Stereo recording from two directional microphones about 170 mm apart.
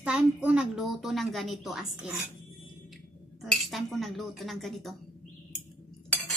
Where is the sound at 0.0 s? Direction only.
5° right (ahead or behind).